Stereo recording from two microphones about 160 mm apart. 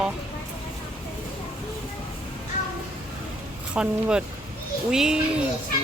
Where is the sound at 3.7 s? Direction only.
5° right (ahead or behind).